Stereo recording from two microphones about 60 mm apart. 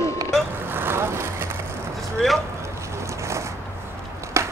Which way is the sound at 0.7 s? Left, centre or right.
Right.